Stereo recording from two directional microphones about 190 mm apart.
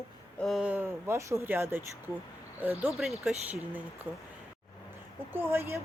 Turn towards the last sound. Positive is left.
turn(degrees=-10)  # may be behind; listen again after turning